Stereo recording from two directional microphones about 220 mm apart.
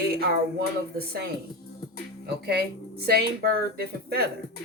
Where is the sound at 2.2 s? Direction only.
50° right (ahead or behind).